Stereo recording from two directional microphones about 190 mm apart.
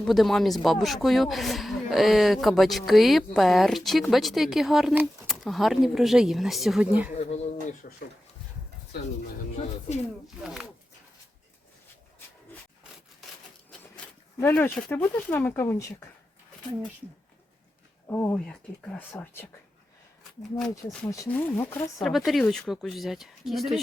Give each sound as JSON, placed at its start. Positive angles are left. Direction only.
{"t": 0.0, "sound": "speech", "side_deg": 0}
{"t": 7.1, "sound": "a sound", "side_deg": 35}
{"t": 7.8, "sound": "a sound", "side_deg": 50}
{"t": 10.4, "sound": "speech", "side_deg": 0}
{"t": 14.3, "sound": "speech", "side_deg": 10}
{"t": 18.1, "sound": "speech", "side_deg": 10}
{"t": 20.6, "sound": "speech", "side_deg": 0}
{"t": 21.1, "sound": "speech", "side_deg": 10}
{"t": 22.0, "sound": "speech", "side_deg": 0}